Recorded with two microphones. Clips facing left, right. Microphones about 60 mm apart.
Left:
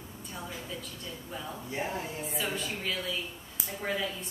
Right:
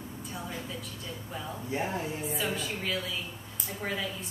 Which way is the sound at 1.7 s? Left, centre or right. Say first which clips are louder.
Right 3 dB; right.